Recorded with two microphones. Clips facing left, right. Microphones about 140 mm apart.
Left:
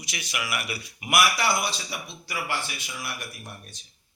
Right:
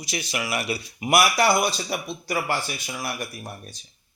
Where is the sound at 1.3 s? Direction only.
45° right (ahead or behind).